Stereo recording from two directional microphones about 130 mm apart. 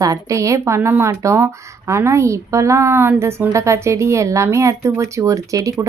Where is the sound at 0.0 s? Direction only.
25° right (ahead or behind).